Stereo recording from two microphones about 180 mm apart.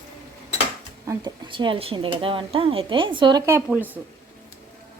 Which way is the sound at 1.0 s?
25° right (ahead or behind).